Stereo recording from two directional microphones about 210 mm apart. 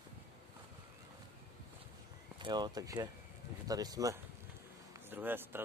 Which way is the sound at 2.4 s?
20° right (ahead or behind).